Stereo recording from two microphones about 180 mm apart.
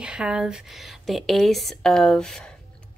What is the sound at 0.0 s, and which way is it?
A woman's voice, 5° right (ahead or behind).